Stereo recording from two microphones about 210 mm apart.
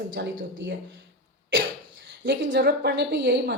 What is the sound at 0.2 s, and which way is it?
Speech, 55° right (ahead or behind).